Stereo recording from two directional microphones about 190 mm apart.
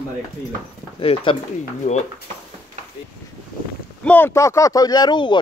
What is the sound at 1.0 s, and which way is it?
Speech, 30° left (ahead or behind).